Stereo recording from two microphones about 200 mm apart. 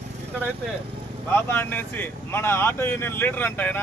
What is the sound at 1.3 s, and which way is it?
A man's voice, 10° left (ahead or behind).